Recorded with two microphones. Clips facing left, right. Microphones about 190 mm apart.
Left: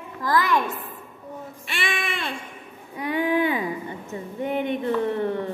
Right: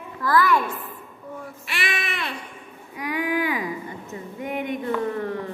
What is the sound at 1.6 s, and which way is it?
Child singing, 25° left (ahead or behind).